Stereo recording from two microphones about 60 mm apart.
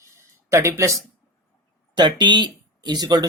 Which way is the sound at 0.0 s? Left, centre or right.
Right.